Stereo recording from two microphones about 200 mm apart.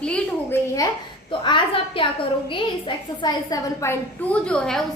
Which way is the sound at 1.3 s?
25° left (ahead or behind).